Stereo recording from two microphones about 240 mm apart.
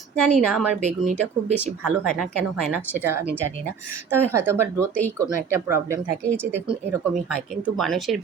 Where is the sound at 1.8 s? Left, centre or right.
Centre.